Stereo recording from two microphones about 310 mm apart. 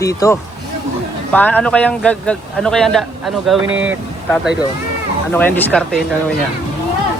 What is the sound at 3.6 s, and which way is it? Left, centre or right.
Speech, right.